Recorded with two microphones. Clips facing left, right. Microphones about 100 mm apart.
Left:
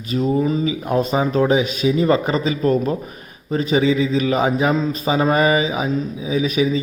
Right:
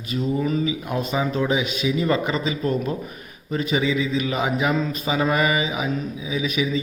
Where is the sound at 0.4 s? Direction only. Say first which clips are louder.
Left 3 dB; 25° left (ahead or behind).